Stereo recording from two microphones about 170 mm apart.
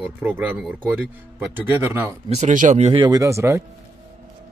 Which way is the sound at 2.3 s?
45° right (ahead or behind).